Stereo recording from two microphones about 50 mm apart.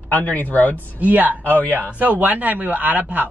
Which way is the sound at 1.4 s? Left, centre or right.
Left.